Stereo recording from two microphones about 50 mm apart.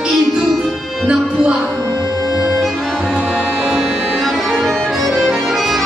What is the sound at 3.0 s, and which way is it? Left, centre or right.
Music, centre.